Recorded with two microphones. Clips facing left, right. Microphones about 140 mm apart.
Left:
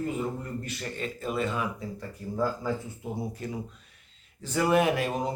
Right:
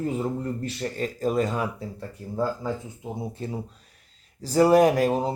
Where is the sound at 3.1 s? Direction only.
30° right (ahead or behind).